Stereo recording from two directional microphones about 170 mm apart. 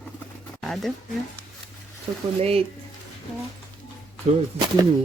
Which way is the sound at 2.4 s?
35° right (ahead or behind).